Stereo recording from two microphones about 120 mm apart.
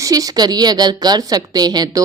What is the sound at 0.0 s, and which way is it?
A woman's voice, 30° right (ahead or behind).